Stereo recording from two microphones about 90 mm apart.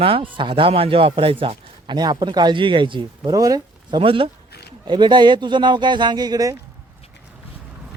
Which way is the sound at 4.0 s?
90° right.